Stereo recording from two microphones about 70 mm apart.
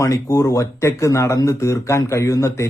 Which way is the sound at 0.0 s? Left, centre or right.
Left.